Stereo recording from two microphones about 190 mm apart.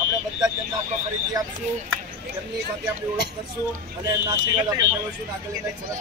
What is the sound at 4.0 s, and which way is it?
Speech, 20° right (ahead or behind).